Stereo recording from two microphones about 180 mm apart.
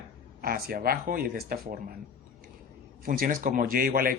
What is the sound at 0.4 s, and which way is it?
Speech, 55° right (ahead or behind).